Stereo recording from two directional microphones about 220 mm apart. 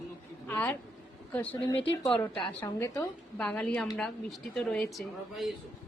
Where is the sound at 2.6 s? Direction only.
10° left (ahead or behind).